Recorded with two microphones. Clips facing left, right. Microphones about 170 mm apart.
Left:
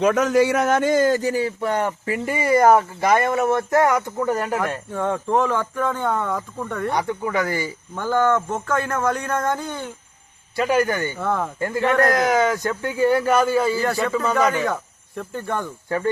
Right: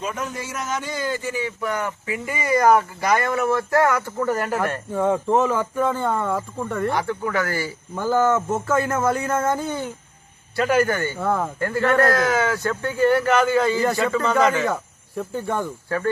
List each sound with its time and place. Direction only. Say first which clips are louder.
0.0 s speech: left 12 dB; 85° left; by 4.8 s 15° left (ahead or behind)
4.9 s speech: right 4 dB; 10° right (ahead or behind)
6.9 s a man's voice: left 1 dB; 15° left (ahead or behind)
7.9 s speech: even; 5° right (ahead or behind)
10.6 s a man's voice: even; 15° left (ahead or behind)
11.2 s speech: right 1 dB; 5° right (ahead or behind)
11.6 s a man's voice: even; 15° left (ahead or behind)
15.1 s speech: right 1 dB; 10° right (ahead or behind)